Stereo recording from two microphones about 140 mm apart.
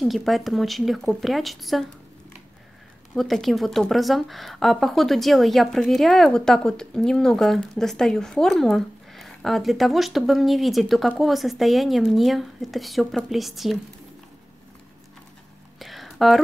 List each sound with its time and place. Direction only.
0.0 s speech: centre (ahead or behind)
3.2 s speech: centre (ahead or behind)
15.8 s a sound: centre (ahead or behind)